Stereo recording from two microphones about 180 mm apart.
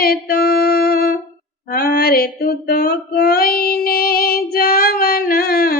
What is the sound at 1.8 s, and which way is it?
Female singing, 55° left (ahead or behind).